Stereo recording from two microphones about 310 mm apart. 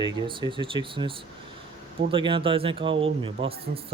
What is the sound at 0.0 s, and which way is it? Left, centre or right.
Speech, centre.